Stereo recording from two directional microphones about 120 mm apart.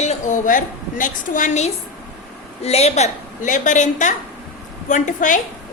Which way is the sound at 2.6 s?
60° left (ahead or behind).